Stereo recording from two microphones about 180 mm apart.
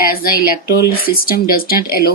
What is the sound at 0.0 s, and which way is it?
Speech, 55° left (ahead or behind).